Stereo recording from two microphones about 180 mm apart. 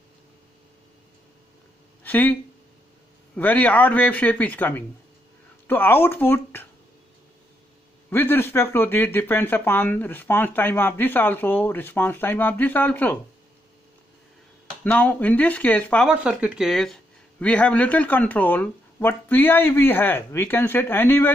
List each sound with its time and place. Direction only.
2.0 s speech: 10° left (ahead or behind)
3.3 s speech: 10° left (ahead or behind)
8.1 s speech: 10° left (ahead or behind)
14.8 s speech: 10° left (ahead or behind)
16.1 s speech: 5° right (ahead or behind); by 21.3 s 10° left (ahead or behind)